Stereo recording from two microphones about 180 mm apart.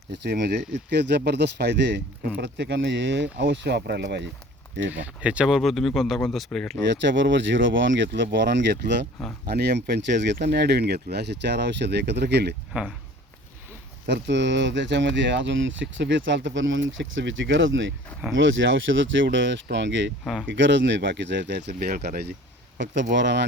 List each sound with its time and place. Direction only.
0.1 s speech: 70° right (ahead or behind)
4.9 s speech: 10° right (ahead or behind)
6.8 s speech: 80° right
14.1 s speech: 80° right
21.8 s speech: 60° right (ahead or behind)
22.8 s speech: 80° right